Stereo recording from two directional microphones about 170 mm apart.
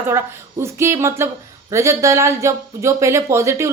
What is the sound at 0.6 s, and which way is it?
Speech, 15° right (ahead or behind).